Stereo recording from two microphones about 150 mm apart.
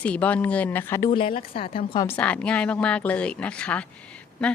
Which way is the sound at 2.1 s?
10° left (ahead or behind).